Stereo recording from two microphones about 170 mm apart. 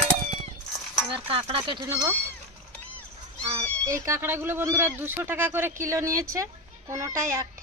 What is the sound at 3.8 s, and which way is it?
Speech, 15° right (ahead or behind).